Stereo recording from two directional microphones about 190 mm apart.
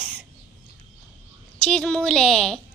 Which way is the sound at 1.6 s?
5° left (ahead or behind).